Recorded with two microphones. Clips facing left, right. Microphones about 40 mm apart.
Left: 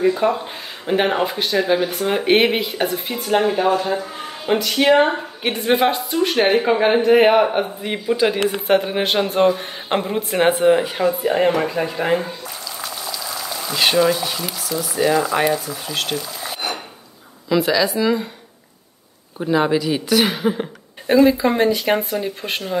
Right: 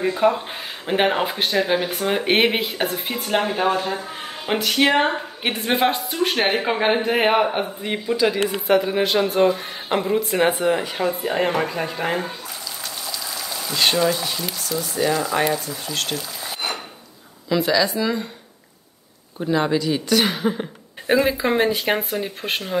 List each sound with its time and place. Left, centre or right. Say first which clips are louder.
0.0 s speech: left 1 dB; centre
4.5 s speech: left 3 dB; centre
8.5 s a man's voice: left 1 dB; left
10.7 s speech: left 5 dB; centre
11.1 s speech: left 4 dB; centre
19.3 s speech: left 3 dB; centre
21.1 s speech: left 4 dB; centre